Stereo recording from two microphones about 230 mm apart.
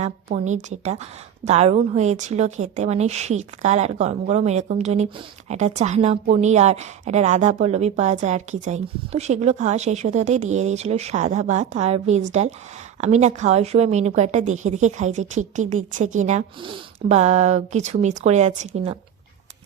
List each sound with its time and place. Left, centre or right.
0.0 s a woman's voice: right